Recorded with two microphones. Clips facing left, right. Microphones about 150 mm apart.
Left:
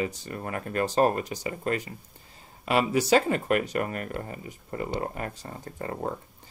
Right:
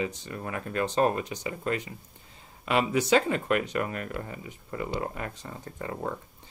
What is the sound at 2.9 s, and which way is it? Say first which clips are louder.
Speech: left 2 dB; 40° left (ahead or behind).